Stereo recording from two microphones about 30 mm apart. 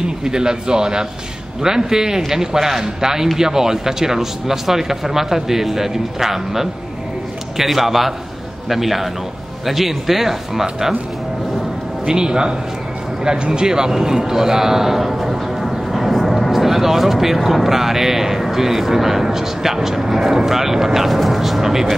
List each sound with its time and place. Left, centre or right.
0.0 s a man's voice: right
12.1 s a man's voice: right; by 15.7 s centre
15.7 s a sound: centre
16.5 s a man's voice: centre